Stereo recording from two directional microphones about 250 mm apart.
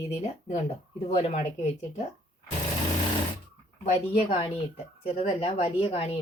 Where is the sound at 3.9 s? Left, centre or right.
Left.